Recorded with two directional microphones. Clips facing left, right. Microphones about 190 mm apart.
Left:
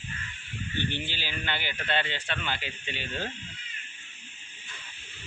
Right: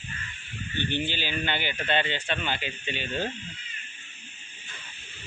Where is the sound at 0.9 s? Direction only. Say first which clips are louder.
Right 6 dB; 20° right (ahead or behind).